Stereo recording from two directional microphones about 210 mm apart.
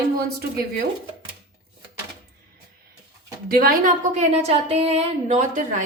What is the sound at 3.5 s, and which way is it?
A woman's voice, 45° right (ahead or behind).